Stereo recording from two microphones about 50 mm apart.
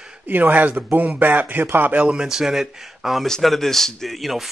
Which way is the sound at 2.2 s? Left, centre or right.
Centre.